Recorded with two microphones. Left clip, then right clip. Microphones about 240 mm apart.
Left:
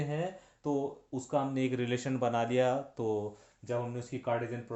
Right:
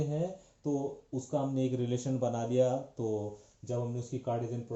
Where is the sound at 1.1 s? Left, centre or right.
Left.